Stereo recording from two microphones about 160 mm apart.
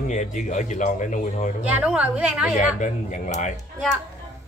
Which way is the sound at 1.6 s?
10° right (ahead or behind).